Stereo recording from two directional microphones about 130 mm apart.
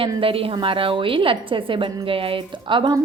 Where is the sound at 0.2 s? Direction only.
45° right (ahead or behind).